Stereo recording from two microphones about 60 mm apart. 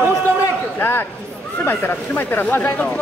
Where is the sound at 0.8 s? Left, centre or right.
Left.